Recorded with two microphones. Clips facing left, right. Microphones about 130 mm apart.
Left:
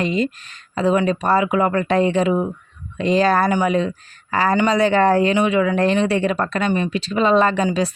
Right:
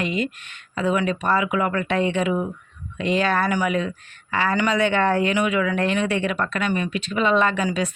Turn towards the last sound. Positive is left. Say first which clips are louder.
# left 4 dB
turn(degrees=30)  # may be behind; listen again after turning